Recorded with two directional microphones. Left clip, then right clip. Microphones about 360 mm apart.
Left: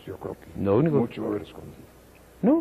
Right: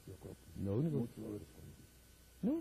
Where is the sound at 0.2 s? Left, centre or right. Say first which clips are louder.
Left 17 dB; centre.